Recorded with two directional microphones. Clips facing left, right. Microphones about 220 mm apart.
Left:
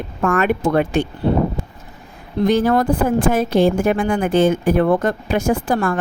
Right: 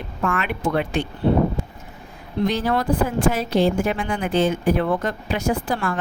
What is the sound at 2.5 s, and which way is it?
Speech, 50° left (ahead or behind).